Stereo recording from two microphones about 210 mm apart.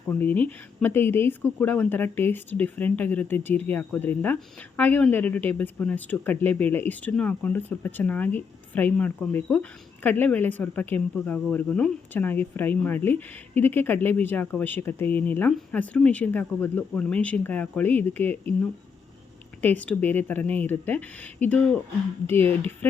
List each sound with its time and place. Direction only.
0.1 s speech: 10° left (ahead or behind)
19.6 s speech: 5° left (ahead or behind)